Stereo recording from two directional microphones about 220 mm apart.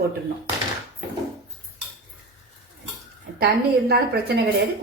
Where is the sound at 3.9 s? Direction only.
45° right (ahead or behind).